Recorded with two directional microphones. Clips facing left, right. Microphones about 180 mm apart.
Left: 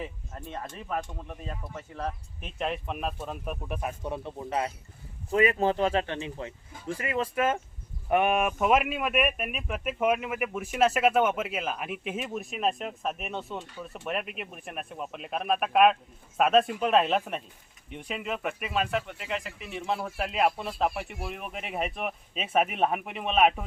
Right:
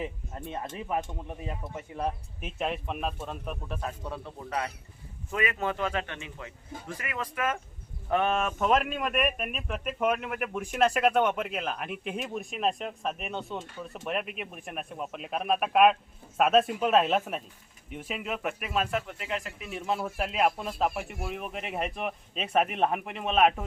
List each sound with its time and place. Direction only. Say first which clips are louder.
0.5 s speech: right 2 dB; 20° right (ahead or behind)
2.6 s a man's voice: even; centre (ahead or behind); by 7.6 s 25° left (ahead or behind)
8.1 s speech: left 2 dB; 15° left (ahead or behind)